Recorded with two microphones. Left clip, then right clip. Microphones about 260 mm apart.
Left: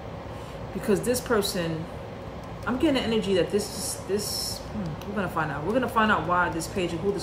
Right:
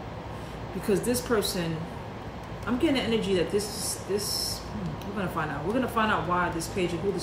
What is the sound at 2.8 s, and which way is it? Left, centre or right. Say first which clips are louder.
Speech: left 2 dB; centre.